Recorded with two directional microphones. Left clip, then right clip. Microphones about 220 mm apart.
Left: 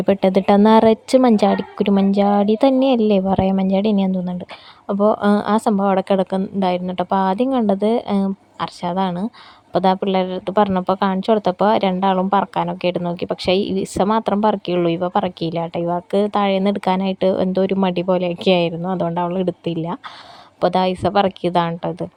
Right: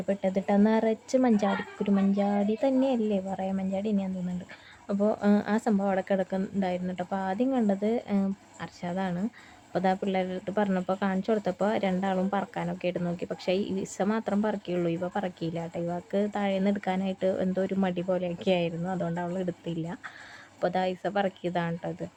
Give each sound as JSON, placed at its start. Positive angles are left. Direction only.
{"t": 0.0, "sound": "speech", "side_deg": 35}